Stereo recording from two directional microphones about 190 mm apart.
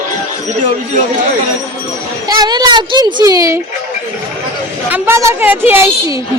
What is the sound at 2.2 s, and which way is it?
A child's voice, 20° right (ahead or behind).